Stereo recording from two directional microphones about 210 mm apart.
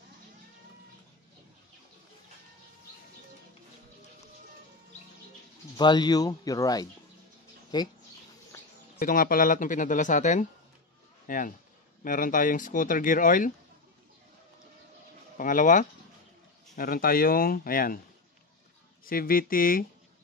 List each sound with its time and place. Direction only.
5.8 s speech: 20° left (ahead or behind)
9.0 s speech: 40° left (ahead or behind)
15.3 s speech: 40° left (ahead or behind)
19.0 s speech: 45° left (ahead or behind)